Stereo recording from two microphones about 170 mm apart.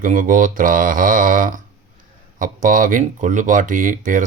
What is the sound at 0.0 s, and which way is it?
Speech, 50° right (ahead or behind).